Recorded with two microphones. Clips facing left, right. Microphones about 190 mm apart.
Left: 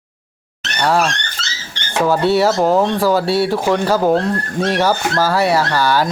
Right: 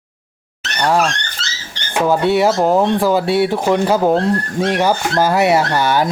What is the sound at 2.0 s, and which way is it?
Speech, 20° right (ahead or behind).